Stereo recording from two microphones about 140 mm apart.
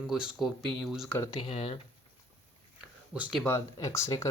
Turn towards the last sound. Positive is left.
turn(degrees=20)  # may be behind; listen again after turning